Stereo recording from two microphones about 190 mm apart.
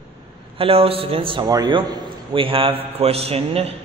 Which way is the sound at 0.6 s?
30° right (ahead or behind).